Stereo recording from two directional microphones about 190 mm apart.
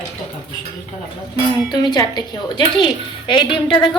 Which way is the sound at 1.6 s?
20° left (ahead or behind).